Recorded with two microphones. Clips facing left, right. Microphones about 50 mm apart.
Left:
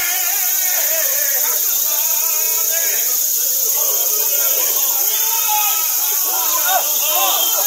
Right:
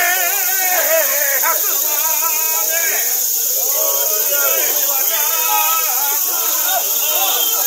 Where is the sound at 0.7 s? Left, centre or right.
Right.